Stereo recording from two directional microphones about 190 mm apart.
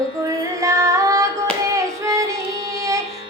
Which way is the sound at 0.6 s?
15° right (ahead or behind).